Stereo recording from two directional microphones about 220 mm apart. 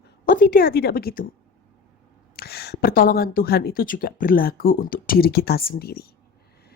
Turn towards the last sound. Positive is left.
turn(degrees=45)  # may be behind; listen again after turning